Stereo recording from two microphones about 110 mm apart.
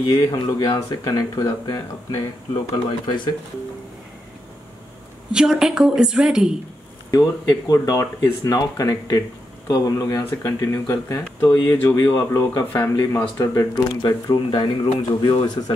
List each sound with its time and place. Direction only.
0.0 s speech: 35° left (ahead or behind)
5.3 s a woman's voice: 5° right (ahead or behind)
7.1 s speech: 40° left (ahead or behind)